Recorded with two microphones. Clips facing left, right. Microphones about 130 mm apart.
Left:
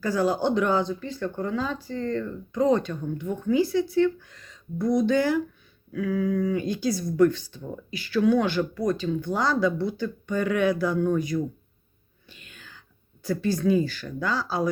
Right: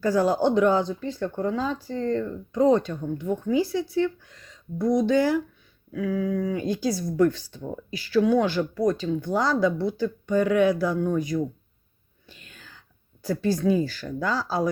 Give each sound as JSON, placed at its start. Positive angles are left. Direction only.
{"t": 0.0, "sound": "speech", "side_deg": -40}
{"t": 1.2, "sound": "speech", "side_deg": -25}
{"t": 11.3, "sound": "speech", "side_deg": -20}
{"t": 12.3, "sound": "whispering", "side_deg": -35}
{"t": 13.3, "sound": "speech", "side_deg": -35}